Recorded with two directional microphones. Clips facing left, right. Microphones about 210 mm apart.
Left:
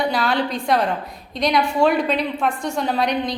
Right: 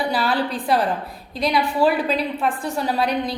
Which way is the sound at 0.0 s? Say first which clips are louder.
Left 1 dB; 5° right (ahead or behind).